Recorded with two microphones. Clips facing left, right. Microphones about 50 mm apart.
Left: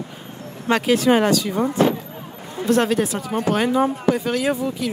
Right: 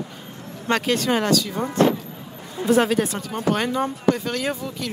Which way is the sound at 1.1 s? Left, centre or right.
Left.